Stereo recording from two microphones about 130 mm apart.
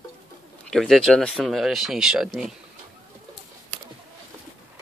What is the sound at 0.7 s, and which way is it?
Speech, centre (ahead or behind).